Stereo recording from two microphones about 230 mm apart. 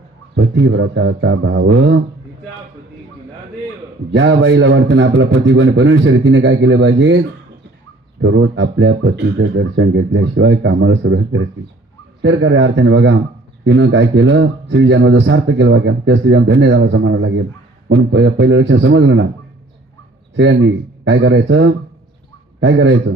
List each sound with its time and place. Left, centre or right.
0.3 s speech: right
4.1 s speech: right
20.3 s speech: right